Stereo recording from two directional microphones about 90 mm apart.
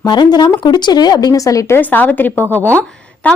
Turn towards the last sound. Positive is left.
turn(degrees=15)  # may be behind; listen again after turning